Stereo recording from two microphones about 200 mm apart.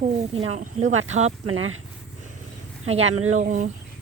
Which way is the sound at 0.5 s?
35° right (ahead or behind).